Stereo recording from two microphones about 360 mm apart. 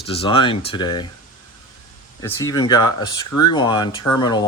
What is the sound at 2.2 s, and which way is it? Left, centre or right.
Speech, centre.